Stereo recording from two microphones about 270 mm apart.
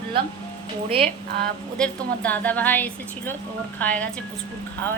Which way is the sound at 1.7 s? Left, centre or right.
Centre.